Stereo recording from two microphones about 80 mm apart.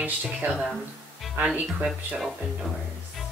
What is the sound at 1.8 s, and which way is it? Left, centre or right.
Speech, centre.